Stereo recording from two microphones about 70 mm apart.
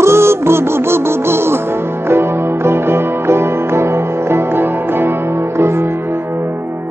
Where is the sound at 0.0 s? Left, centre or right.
Right.